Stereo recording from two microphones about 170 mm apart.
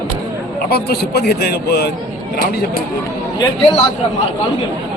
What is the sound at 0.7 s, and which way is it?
A man's voice, 70° left (ahead or behind).